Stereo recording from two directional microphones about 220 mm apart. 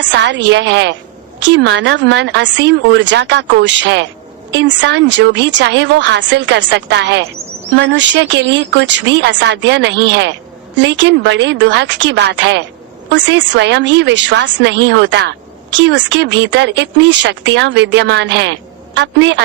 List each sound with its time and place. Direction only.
0.0 s speech: 55° right (ahead or behind)